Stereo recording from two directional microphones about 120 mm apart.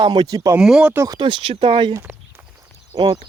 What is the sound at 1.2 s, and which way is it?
Speech, 45° right (ahead or behind).